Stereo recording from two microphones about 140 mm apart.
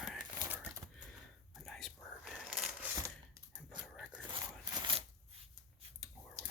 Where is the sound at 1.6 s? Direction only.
5° left (ahead or behind).